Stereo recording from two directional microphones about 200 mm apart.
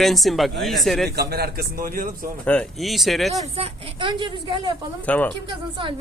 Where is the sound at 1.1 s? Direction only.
50° right (ahead or behind).